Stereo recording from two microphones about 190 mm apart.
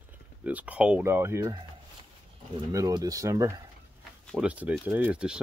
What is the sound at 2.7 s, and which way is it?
Speech, 20° right (ahead or behind).